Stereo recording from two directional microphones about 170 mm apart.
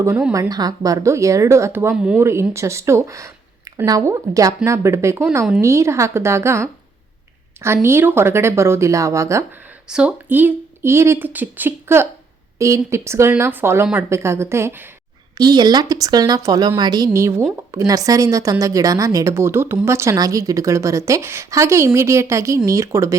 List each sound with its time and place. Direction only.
0.0 s speech: 10° right (ahead or behind)
0.3 s speech: 20° right (ahead or behind)
9.9 s a woman's voice: 5° right (ahead or behind)